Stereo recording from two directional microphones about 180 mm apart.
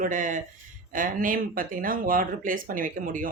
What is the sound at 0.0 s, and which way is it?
Speech, 45° right (ahead or behind).